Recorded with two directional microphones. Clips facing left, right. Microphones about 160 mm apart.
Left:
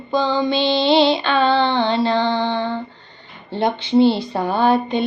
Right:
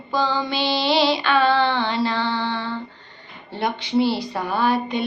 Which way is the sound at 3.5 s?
25° left (ahead or behind).